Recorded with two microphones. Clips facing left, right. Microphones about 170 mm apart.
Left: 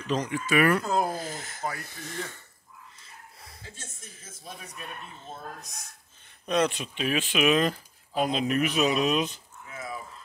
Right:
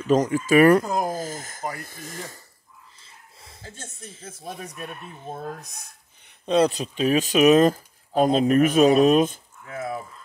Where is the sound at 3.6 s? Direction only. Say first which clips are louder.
Right 7 dB; 60° right (ahead or behind).